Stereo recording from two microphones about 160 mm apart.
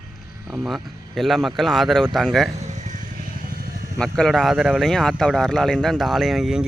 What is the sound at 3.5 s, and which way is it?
Vehicle, 70° right (ahead or behind).